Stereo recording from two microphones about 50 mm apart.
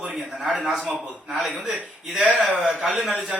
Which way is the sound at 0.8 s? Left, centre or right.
Right.